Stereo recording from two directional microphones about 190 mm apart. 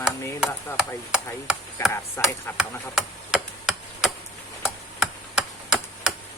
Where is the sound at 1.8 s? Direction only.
15° left (ahead or behind).